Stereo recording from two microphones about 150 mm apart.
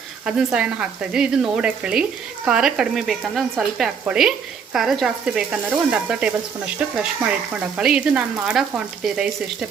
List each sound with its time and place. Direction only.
0.3 s speech: 5° right (ahead or behind)
7.8 s speech: 5° right (ahead or behind)